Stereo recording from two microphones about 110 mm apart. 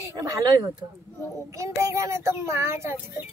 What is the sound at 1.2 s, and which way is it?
Speech, 25° left (ahead or behind).